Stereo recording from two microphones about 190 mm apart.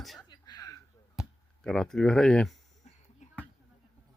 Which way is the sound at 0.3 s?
20° left (ahead or behind).